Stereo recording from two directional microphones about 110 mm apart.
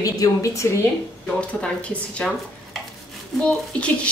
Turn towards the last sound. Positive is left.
turn(degrees=10)  # may be behind; listen again after turning